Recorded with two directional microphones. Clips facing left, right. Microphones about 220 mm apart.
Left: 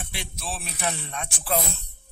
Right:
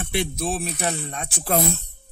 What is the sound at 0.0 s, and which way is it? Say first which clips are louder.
Speech: right 12 dB; 55° right (ahead or behind).